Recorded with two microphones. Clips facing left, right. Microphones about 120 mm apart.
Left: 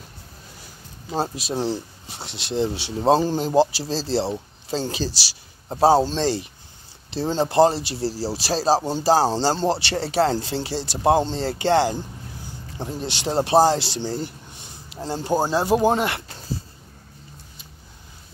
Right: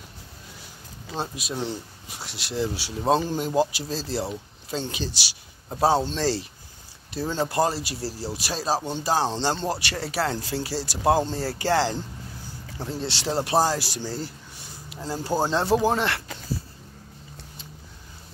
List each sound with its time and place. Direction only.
1.1 s speech: 35° left (ahead or behind)
15.3 s speech: 15° left (ahead or behind)